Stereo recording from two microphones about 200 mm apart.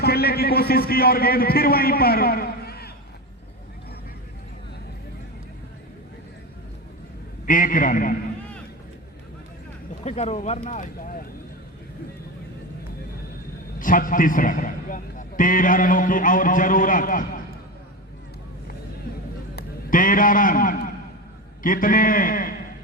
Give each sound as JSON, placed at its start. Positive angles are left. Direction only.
{"t": 0.0, "sound": "a man's voice", "side_deg": 50}
{"t": 7.4, "sound": "a man's voice", "side_deg": 40}
{"t": 10.0, "sound": "speech", "side_deg": 30}
{"t": 13.7, "sound": "a man's voice", "side_deg": 45}
{"t": 19.5, "sound": "a man's voice", "side_deg": 45}